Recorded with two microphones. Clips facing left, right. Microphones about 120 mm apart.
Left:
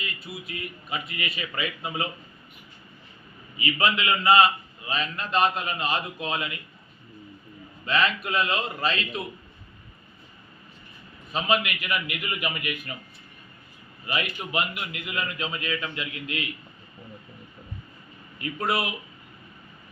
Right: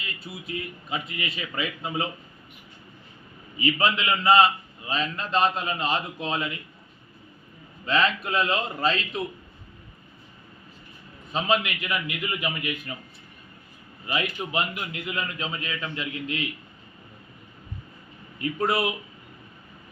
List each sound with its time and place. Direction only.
0.2 s a man's voice: 25° right (ahead or behind)
3.6 s a man's voice: 30° right (ahead or behind)
7.9 s a man's voice: 30° right (ahead or behind)
11.3 s a man's voice: 25° right (ahead or behind)
14.1 s a man's voice: 25° right (ahead or behind)
18.3 s a man's voice: 25° right (ahead or behind)